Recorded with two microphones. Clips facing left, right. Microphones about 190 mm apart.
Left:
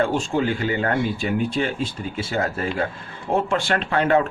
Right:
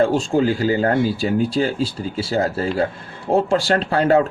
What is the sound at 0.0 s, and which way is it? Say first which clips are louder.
Speech: right 4 dB; 35° right (ahead or behind).